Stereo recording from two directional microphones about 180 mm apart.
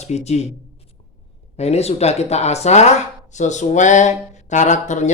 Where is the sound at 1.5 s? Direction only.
35° left (ahead or behind).